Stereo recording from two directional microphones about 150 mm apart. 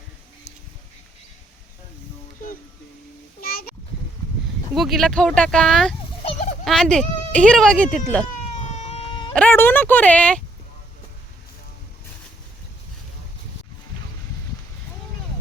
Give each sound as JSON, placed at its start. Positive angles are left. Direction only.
{"t": 3.4, "sound": "splash", "side_deg": 80}
{"t": 4.7, "sound": "speech", "side_deg": 0}
{"t": 8.6, "sound": "a sound", "side_deg": 50}
{"t": 9.3, "sound": "speech", "side_deg": 10}